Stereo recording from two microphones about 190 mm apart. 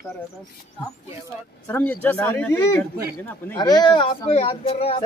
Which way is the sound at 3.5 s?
20° left (ahead or behind).